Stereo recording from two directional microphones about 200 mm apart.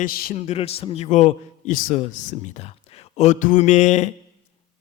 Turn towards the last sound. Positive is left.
turn(degrees=35)  # may be behind; listen again after turning